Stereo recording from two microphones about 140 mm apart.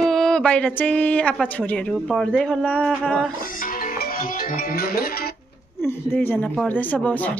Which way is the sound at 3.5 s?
80° left.